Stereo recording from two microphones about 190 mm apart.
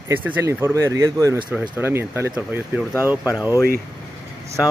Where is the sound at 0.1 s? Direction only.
10° right (ahead or behind).